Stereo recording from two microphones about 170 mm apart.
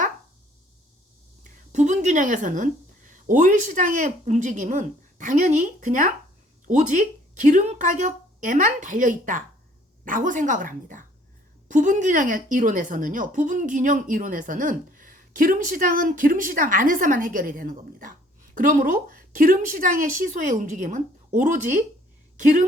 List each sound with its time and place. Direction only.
1.7 s a woman's voice: 45° right (ahead or behind)